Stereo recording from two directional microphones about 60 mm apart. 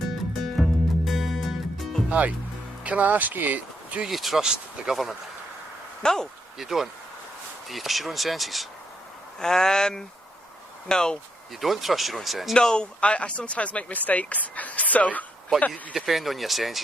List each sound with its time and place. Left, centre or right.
0.3 s music: centre
2.0 s speech: right
4.0 s speech: centre
6.0 s speech: centre
6.6 s speech: centre
11.6 s speech: centre
12.5 s speech: centre
16.0 s speech: centre